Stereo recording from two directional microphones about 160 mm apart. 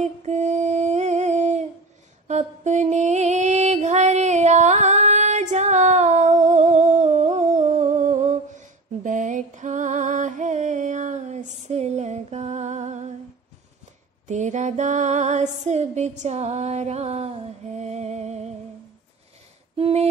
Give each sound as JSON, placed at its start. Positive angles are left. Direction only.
{"t": 0.0, "sound": "a sound", "side_deg": -45}
{"t": 2.2, "sound": "mantra", "side_deg": -45}
{"t": 14.2, "sound": "music", "side_deg": -50}
{"t": 19.8, "sound": "female singing", "side_deg": -40}